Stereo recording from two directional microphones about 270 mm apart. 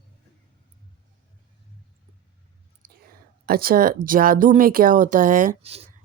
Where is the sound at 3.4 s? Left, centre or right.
Right.